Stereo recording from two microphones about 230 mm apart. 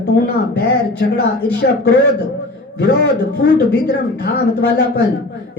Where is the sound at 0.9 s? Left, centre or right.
Left.